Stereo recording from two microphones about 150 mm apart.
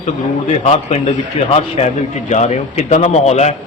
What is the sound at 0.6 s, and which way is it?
A man's voice, 45° left (ahead or behind).